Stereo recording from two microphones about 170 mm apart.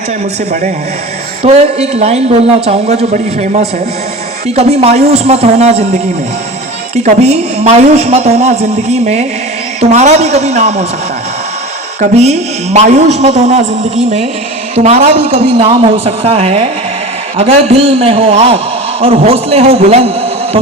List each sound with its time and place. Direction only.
1.4 s a man's voice: 40° right (ahead or behind)
11.9 s a man's voice: 40° right (ahead or behind)